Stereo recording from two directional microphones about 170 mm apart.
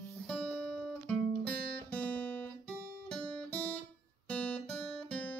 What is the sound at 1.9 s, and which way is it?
Guitar, 10° left (ahead or behind).